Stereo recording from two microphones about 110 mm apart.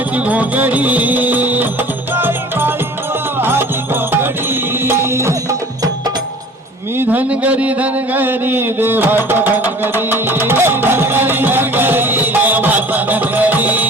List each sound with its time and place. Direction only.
0.3 s music: 15° right (ahead or behind)
4.9 s music: 25° right (ahead or behind)
7.0 s a sound: 15° right (ahead or behind)